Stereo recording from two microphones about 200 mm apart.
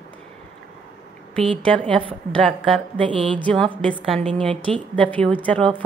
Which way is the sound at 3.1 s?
25° right (ahead or behind).